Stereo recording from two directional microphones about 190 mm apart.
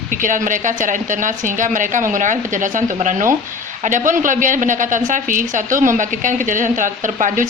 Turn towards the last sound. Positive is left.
turn(degrees=-45)  # may be behind; listen again after turning